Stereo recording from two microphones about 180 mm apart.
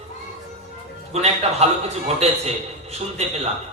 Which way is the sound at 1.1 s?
35° right (ahead or behind).